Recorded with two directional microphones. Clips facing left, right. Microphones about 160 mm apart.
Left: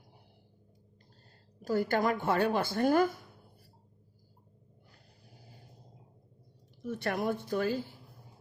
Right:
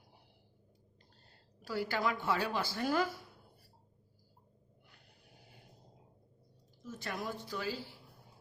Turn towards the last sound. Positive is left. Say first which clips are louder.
# left 8 dB
turn(degrees=50)  # may be behind; listen again after turning